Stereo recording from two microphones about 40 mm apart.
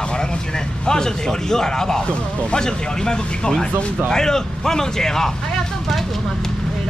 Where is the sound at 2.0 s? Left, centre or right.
Left.